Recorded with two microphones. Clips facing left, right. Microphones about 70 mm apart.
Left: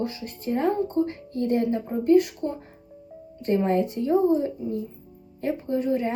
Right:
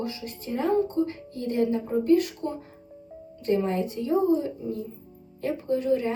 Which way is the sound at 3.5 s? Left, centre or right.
Left.